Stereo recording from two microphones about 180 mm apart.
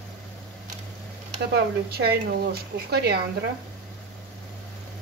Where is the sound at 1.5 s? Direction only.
65° right (ahead or behind).